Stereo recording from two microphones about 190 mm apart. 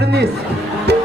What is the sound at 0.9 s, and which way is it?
Music, 60° right (ahead or behind).